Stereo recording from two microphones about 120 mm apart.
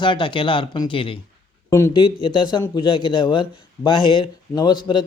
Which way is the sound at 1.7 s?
25° left (ahead or behind).